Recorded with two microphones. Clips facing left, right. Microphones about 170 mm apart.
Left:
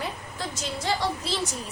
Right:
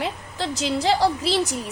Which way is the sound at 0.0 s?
75° right (ahead or behind).